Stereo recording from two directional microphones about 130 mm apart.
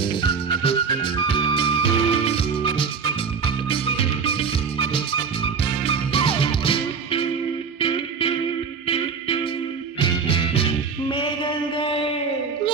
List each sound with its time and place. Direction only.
0.0 s music: 45° left (ahead or behind)